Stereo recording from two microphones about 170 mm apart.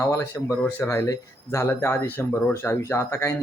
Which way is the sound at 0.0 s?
15° left (ahead or behind).